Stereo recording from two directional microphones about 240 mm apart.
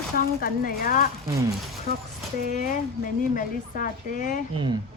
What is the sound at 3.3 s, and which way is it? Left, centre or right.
Speech, left.